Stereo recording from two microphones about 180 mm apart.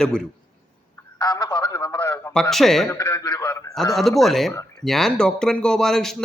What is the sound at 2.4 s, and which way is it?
Speech, centre (ahead or behind).